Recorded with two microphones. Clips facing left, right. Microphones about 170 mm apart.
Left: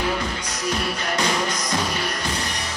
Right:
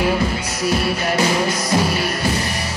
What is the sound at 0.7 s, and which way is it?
Music, 10° right (ahead or behind).